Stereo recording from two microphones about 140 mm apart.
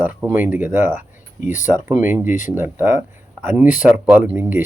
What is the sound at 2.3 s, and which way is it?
Speech, 65° left (ahead or behind).